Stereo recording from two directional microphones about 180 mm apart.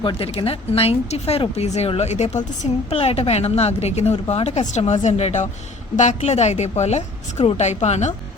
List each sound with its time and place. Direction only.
0.0 s a woman's voice: 30° left (ahead or behind)